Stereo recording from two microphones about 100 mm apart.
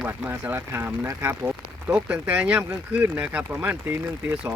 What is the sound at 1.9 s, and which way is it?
Speech, 15° right (ahead or behind).